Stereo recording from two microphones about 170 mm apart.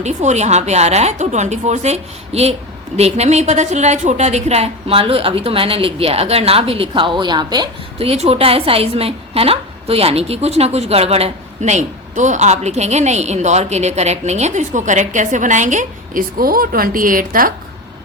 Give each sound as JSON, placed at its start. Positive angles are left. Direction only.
{"t": 0.0, "sound": "speech", "side_deg": -45}